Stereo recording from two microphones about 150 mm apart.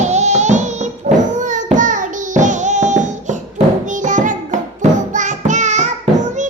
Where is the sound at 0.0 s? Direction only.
50° right (ahead or behind).